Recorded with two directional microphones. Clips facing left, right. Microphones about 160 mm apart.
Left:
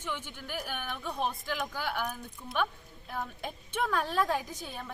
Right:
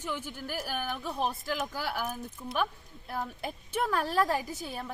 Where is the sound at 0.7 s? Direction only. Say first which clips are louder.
Right 4 dB; 40° right (ahead or behind).